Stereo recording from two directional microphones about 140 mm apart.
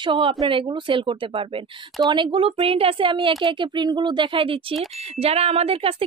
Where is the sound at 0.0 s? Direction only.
40° right (ahead or behind).